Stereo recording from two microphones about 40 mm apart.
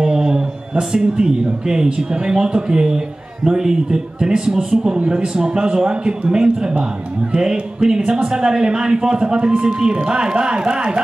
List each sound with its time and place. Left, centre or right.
0.0 s a man's voice: centre
4.9 s a man's voice: right